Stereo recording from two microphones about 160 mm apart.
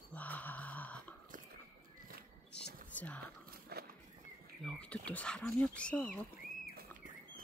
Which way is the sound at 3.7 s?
80° right.